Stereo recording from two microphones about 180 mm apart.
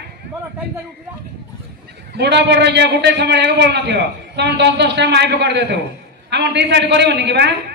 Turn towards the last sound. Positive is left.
turn(degrees=-70)  # may be behind; listen again after turning